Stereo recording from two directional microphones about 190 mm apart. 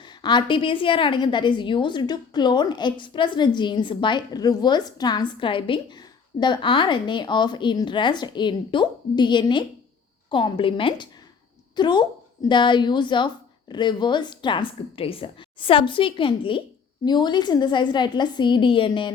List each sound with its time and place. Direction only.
0.0 s a woman's voice: 25° left (ahead or behind)